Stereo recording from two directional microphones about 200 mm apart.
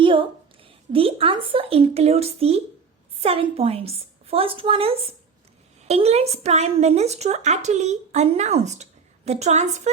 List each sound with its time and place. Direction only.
0.0 s a woman's voice: 25° right (ahead or behind)